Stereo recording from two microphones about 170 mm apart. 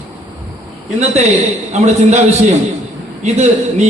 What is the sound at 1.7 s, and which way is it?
A man's voice, 40° right (ahead or behind).